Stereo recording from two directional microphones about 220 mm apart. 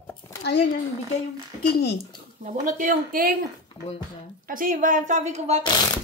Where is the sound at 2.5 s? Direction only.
35° right (ahead or behind).